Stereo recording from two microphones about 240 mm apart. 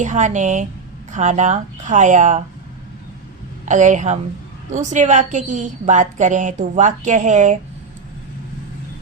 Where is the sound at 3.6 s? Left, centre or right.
Right.